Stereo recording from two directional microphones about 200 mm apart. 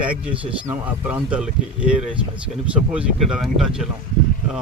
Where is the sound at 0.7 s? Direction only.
5° right (ahead or behind).